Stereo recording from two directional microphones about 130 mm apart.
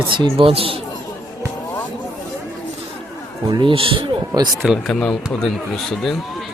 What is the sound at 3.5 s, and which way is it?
Speech, 40° right (ahead or behind).